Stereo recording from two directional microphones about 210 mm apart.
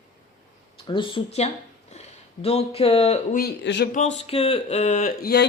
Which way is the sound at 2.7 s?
30° left (ahead or behind).